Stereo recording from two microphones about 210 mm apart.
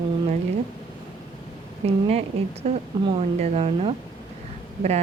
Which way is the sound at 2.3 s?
30° right (ahead or behind).